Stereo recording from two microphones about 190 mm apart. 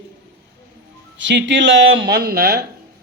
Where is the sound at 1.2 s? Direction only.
80° right.